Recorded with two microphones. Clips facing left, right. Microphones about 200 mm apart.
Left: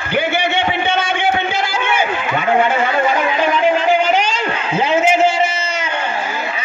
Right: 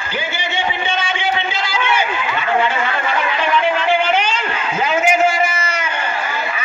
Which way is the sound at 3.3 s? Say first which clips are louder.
Left 3 dB; 40° left (ahead or behind).